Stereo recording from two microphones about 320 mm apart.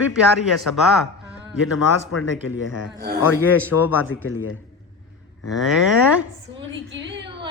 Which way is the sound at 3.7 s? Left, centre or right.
Left.